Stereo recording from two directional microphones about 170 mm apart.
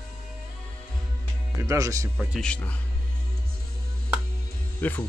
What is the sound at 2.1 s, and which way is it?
Speech, centre (ahead or behind).